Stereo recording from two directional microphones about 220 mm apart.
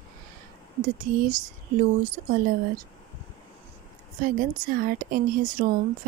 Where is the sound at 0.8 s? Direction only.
40° right (ahead or behind).